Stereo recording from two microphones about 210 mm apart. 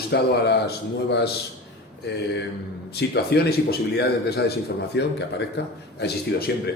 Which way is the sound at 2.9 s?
50° left (ahead or behind).